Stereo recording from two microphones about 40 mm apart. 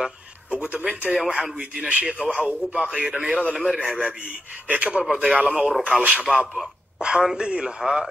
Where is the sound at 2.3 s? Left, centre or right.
Centre.